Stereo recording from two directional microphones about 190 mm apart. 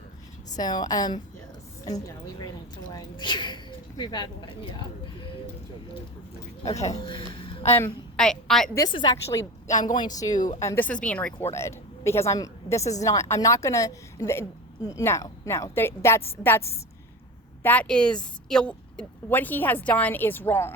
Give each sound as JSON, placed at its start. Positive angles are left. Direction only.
{"t": 0.5, "sound": "speech", "side_deg": 20}
{"t": 2.9, "sound": "speech", "side_deg": 25}
{"t": 6.8, "sound": "a woman's voice", "side_deg": 30}
{"t": 7.8, "sound": "a woman's voice", "side_deg": 10}
{"t": 8.7, "sound": "a woman's voice", "side_deg": 25}